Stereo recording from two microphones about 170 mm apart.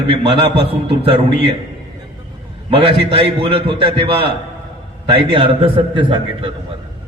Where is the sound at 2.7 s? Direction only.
35° right (ahead or behind).